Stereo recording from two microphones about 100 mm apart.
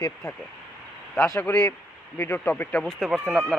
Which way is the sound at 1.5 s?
30° left (ahead or behind).